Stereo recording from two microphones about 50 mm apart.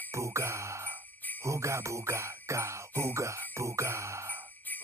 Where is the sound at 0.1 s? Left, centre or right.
Right.